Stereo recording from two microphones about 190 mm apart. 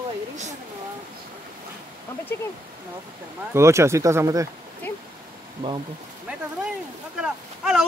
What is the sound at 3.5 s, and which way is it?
Speech, 15° right (ahead or behind).